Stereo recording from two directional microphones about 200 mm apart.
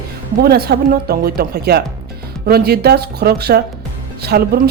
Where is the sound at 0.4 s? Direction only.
50° right (ahead or behind).